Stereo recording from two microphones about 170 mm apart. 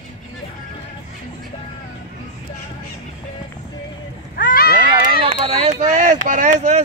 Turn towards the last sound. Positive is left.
turn(degrees=-45)  # may be behind; listen again after turning